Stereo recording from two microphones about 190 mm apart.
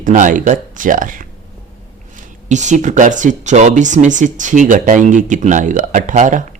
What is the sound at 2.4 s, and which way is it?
Speech, 40° right (ahead or behind).